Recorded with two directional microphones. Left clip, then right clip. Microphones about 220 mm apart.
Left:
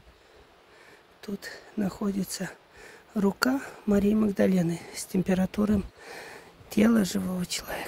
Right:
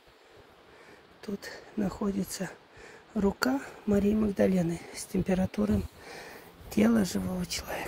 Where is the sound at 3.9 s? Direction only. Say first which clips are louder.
Left 2 dB; 30° left (ahead or behind).